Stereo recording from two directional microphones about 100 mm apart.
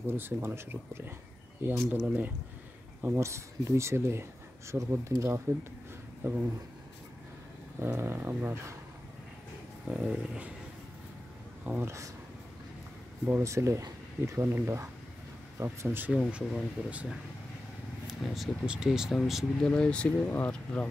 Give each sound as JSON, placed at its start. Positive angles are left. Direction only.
{"t": 0.0, "sound": "speech", "side_deg": -20}
{"t": 3.0, "sound": "speech", "side_deg": -25}
{"t": 7.8, "sound": "speech", "side_deg": -25}
{"t": 9.8, "sound": "speech", "side_deg": -10}
{"t": 11.6, "sound": "speech", "side_deg": -15}
{"t": 13.3, "sound": "speech", "side_deg": -30}
{"t": 16.1, "sound": "speech", "side_deg": -10}
{"t": 18.2, "sound": "speech", "side_deg": 0}
{"t": 19.7, "sound": "speech", "side_deg": 10}